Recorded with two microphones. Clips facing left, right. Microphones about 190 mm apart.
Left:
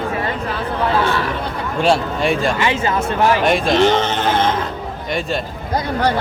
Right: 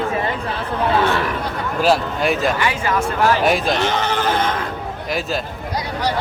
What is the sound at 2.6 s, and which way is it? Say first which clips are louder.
Speech: left 2 dB; 25° left (ahead or behind).